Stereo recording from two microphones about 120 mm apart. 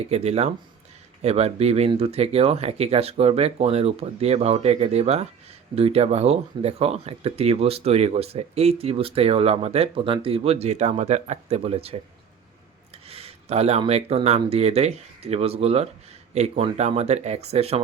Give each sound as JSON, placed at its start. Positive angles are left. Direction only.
{"t": 0.1, "sound": "speech", "side_deg": -60}
{"t": 13.1, "sound": "a sound", "side_deg": -55}
{"t": 14.3, "sound": "speech", "side_deg": -60}